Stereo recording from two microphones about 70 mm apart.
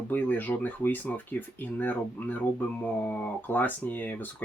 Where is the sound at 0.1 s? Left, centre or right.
Left.